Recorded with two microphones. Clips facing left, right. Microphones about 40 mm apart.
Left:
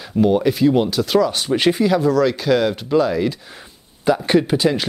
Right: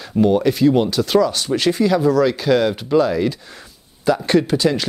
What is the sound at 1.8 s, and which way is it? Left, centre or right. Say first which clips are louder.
Speech: right 4 dB; centre.